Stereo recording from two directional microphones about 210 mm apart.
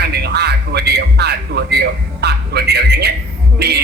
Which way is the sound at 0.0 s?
50° right (ahead or behind).